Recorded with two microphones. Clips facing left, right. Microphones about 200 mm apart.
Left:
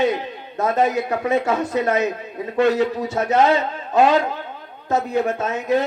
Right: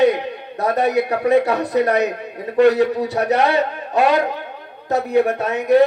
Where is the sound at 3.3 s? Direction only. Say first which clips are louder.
Left 2 dB; 65° right (ahead or behind).